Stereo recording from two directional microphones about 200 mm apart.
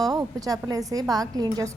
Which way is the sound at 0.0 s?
15° right (ahead or behind).